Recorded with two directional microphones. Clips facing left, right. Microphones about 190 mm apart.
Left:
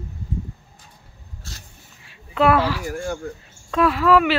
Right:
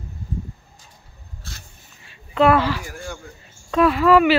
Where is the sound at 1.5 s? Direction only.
40° left (ahead or behind).